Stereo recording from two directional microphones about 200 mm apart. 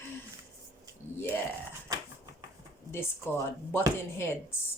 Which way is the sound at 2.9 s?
10° left (ahead or behind).